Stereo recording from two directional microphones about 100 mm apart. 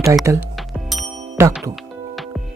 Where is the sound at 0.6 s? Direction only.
Centre (ahead or behind).